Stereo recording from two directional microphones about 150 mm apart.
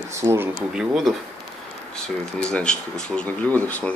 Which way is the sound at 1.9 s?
5° left (ahead or behind).